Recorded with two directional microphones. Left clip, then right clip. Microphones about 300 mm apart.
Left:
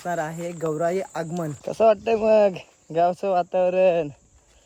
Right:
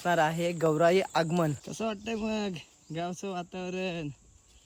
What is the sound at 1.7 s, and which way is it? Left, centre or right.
Speech, right.